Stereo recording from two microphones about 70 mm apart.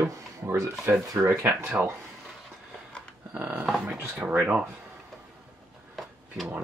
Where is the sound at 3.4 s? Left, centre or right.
Centre.